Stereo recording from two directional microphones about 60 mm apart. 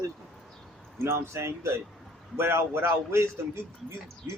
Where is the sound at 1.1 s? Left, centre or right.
Right.